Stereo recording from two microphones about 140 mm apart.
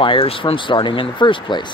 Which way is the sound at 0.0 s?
40° left (ahead or behind).